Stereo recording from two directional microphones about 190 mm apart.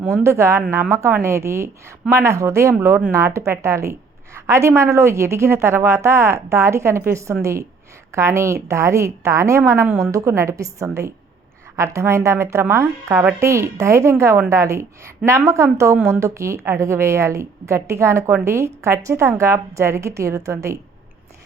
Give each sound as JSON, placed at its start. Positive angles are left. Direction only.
{"t": 0.2, "sound": "a woman's voice", "side_deg": -15}